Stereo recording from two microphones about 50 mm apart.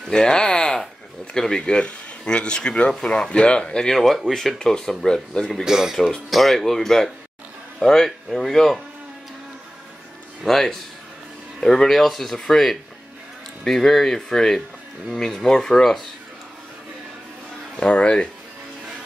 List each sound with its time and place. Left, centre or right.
0.1 s a sound: centre
1.6 s speech: left
5.6 s speech: centre
6.3 s speech: centre
10.4 s speech: centre
17.7 s speech: centre